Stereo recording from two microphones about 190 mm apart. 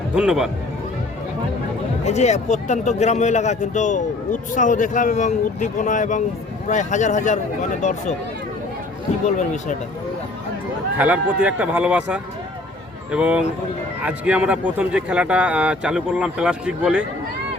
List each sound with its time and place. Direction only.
0.1 s speech: 5° right (ahead or behind)
2.0 s a man's voice: 35° left (ahead or behind)
9.2 s a man's voice: 40° left (ahead or behind)
10.9 s speech: 10° right (ahead or behind)